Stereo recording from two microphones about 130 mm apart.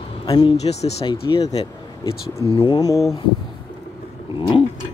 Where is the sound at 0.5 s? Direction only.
55° left (ahead or behind).